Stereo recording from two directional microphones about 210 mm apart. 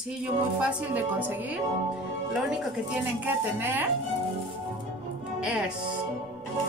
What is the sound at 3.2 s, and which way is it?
Speech, 10° right (ahead or behind).